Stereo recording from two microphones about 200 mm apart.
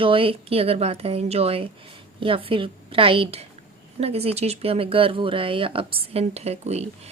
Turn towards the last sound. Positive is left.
turn(degrees=-30)  # may be behind; listen again after turning